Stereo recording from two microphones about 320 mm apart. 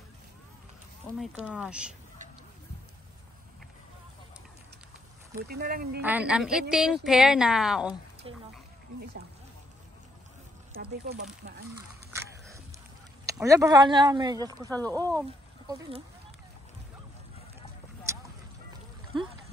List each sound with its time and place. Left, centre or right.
1.5 s a woman's voice: centre
5.5 s speech: right
6.0 s a woman's voice: centre
10.8 s speech: right
12.1 s biting: centre
13.2 s speech: centre